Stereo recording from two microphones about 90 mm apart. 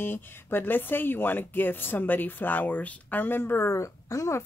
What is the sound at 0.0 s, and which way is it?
Speech, 25° left (ahead or behind).